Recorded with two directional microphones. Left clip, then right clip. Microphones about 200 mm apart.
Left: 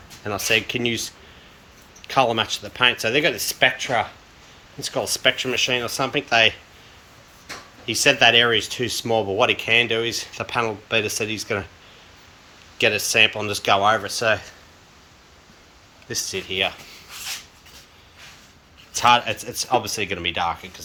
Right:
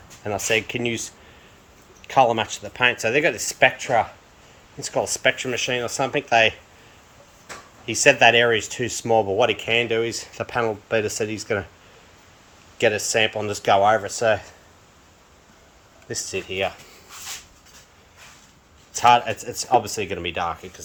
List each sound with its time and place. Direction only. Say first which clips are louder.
0.3 s speech: left 1 dB; 20° right (ahead or behind)
7.9 s speech: right 1 dB; 20° right (ahead or behind)
12.8 s speech: left 2 dB; 20° right (ahead or behind)
16.0 s speech: left 1 dB; 25° right (ahead or behind)
18.9 s speech: right 1 dB; 25° right (ahead or behind)